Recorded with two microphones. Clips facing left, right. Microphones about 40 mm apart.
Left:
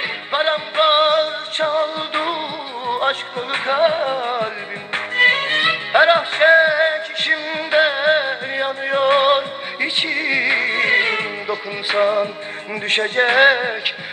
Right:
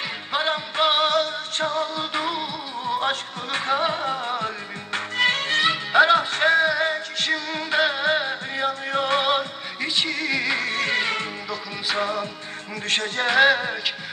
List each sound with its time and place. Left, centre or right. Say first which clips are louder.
0.0 s music: left 5 dB; left